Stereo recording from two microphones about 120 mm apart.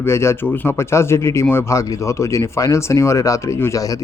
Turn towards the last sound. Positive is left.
turn(degrees=30)  # may be behind; listen again after turning